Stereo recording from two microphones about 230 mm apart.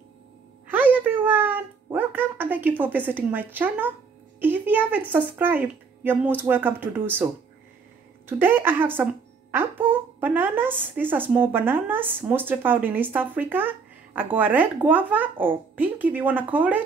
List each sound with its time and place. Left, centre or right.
0.7 s a sound: centre
2.8 s speech: centre
8.3 s speech: centre